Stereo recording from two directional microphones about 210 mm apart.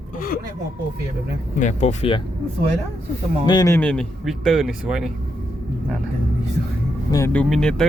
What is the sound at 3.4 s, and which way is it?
Speech, 20° left (ahead or behind).